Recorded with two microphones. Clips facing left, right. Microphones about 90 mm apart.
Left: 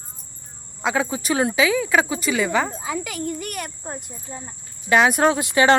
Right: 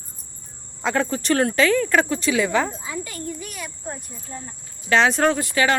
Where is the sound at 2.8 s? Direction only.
90° left; by 3.7 s 60° left (ahead or behind).